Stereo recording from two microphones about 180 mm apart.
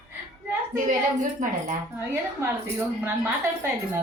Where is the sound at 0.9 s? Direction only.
45° right (ahead or behind).